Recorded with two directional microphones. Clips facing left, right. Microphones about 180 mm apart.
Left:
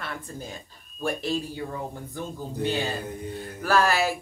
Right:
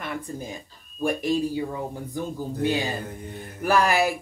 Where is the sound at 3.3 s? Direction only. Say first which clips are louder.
Right 2 dB; 20° right (ahead or behind).